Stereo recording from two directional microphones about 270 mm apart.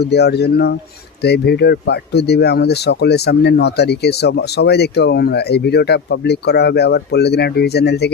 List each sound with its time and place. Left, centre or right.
0.0 s speech: left